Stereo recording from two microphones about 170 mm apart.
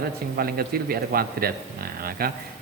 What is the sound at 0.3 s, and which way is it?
Speech, 60° right (ahead or behind).